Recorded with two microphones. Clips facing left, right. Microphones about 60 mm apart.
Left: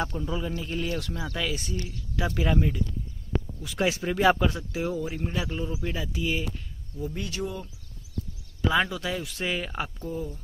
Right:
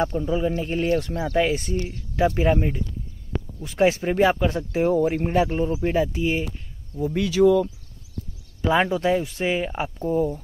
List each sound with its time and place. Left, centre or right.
0.0 s speech: right
4.9 s speech: right
7.2 s speech: right
8.6 s speech: right